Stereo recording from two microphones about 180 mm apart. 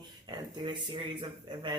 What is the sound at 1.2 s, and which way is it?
Speech, 25° right (ahead or behind).